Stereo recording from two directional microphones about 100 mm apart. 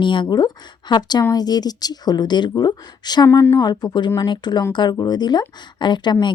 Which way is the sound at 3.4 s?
30° left (ahead or behind).